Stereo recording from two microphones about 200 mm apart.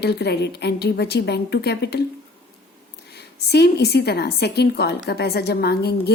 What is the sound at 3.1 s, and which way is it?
A woman's voice, 55° left (ahead or behind).